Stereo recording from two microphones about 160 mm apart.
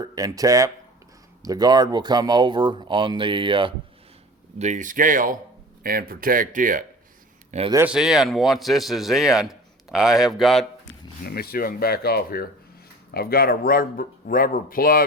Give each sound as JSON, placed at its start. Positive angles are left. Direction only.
{"t": 0.0, "sound": "speech", "side_deg": -20}
{"t": 4.5, "sound": "speech", "side_deg": -45}
{"t": 7.5, "sound": "speech", "side_deg": -45}
{"t": 7.9, "sound": "a man's voice", "side_deg": -5}
{"t": 11.2, "sound": "speech", "side_deg": 75}